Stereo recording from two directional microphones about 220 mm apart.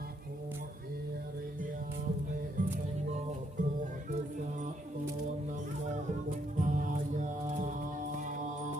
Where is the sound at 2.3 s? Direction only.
40° right (ahead or behind).